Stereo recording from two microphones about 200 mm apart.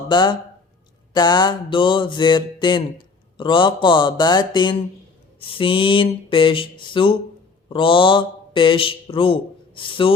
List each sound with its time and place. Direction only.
0.1 s speech: 20° left (ahead or behind)